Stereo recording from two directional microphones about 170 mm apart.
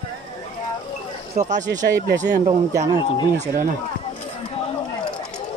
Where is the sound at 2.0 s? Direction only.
90° right.